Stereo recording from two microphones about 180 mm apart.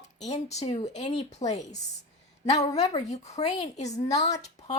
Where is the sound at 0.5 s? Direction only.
35° left (ahead or behind).